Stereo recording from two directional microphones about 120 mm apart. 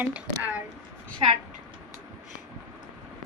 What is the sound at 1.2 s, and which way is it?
Speech, 50° right (ahead or behind).